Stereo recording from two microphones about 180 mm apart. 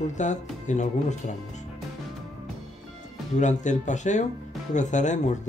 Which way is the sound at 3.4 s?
40° left (ahead or behind).